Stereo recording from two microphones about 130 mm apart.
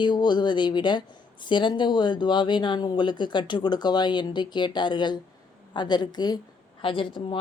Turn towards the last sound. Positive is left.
turn(degrees=40)  # may be behind; listen again after turning